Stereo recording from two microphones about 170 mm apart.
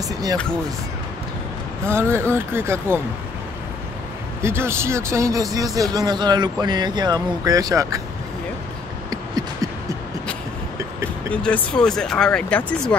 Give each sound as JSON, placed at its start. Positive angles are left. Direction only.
{"t": 0.1, "sound": "speech", "side_deg": -20}
{"t": 1.9, "sound": "speech", "side_deg": -15}
{"t": 4.4, "sound": "speech", "side_deg": -15}
{"t": 9.1, "sound": "beatboxing", "side_deg": -20}
{"t": 11.4, "sound": "speech", "side_deg": 5}